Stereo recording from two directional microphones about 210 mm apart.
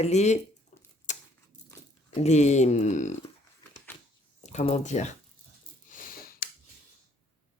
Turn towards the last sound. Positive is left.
turn(degrees=45)  # may be behind; listen again after turning